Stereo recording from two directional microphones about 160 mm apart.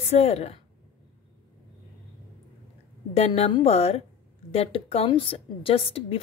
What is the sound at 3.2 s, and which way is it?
A woman's voice, 40° left (ahead or behind).